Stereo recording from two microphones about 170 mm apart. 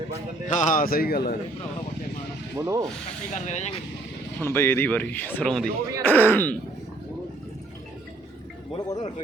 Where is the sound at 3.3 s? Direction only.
40° left (ahead or behind).